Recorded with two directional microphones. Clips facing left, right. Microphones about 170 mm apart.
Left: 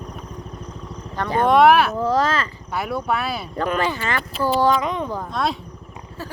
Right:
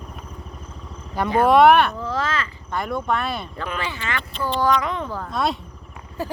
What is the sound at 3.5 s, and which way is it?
Speech, 45° left (ahead or behind).